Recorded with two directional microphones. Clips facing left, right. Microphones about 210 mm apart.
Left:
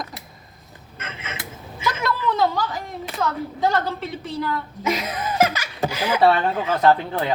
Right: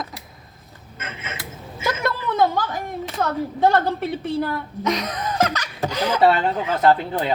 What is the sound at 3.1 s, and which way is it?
A woman's voice, 55° right (ahead or behind).